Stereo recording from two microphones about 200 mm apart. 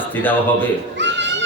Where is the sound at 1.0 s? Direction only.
65° right (ahead or behind).